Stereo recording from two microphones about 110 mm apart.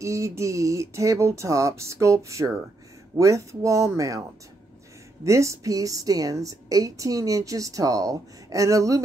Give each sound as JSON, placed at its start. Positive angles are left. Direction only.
{"t": 0.0, "sound": "speech", "side_deg": -25}
{"t": 5.2, "sound": "a woman's voice", "side_deg": -30}